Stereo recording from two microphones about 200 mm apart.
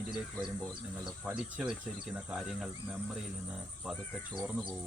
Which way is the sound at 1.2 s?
5° right (ahead or behind).